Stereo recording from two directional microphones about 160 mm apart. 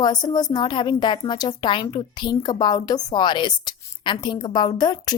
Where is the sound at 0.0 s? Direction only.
25° left (ahead or behind).